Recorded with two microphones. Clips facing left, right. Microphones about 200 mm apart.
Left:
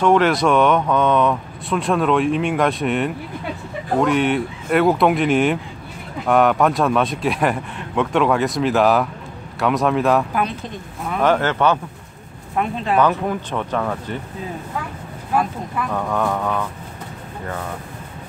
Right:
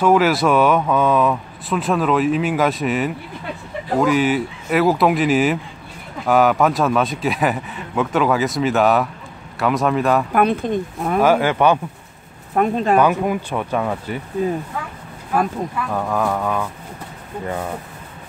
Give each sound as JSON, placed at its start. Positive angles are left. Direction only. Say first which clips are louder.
{"t": 0.0, "sound": "speech", "louder": "even", "side_deg": -5}
{"t": 10.3, "sound": "speech", "louder": "right 7 dB", "side_deg": -55}
{"t": 11.1, "sound": "speech", "louder": "right 2 dB", "side_deg": -10}
{"t": 12.5, "sound": "speech", "louder": "right 4 dB", "side_deg": -45}
{"t": 13.0, "sound": "speech", "louder": "right 1 dB", "side_deg": -10}
{"t": 15.9, "sound": "speech", "louder": "even", "side_deg": 0}